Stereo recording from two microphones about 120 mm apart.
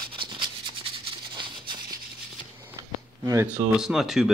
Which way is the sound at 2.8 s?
25° right (ahead or behind).